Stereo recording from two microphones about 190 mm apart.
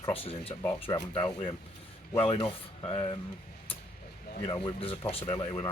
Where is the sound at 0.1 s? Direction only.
30° left (ahead or behind).